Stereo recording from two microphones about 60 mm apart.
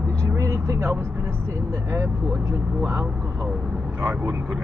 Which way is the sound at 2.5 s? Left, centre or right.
Right.